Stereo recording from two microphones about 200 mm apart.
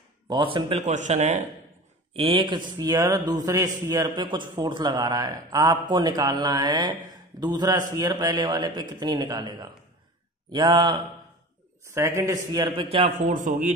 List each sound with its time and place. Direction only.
0.3 s speech: 25° right (ahead or behind)
2.1 s a man's voice: 25° right (ahead or behind)